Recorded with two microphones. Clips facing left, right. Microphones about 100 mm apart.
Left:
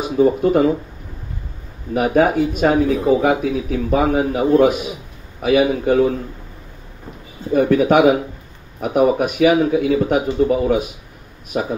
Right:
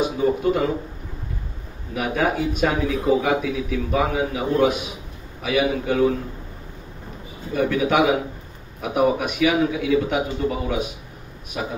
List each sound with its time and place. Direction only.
0.2 s speech: 45° left (ahead or behind)
2.0 s speech: 40° left (ahead or behind)
7.5 s speech: 40° left (ahead or behind)